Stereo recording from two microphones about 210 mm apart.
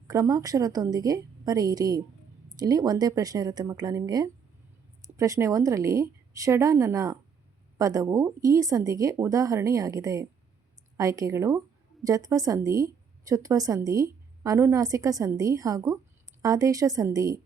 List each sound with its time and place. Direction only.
0.1 s a woman's voice: 15° right (ahead or behind)